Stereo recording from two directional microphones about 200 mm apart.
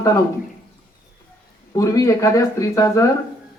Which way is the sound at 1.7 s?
15° left (ahead or behind).